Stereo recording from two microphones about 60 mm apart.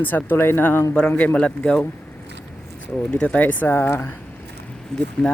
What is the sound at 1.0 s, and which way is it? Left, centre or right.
Speech, left.